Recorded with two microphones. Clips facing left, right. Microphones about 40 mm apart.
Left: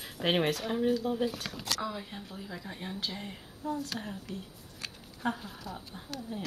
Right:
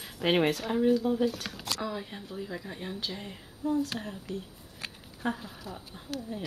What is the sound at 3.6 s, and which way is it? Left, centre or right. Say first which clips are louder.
Speech: right 5 dB; centre.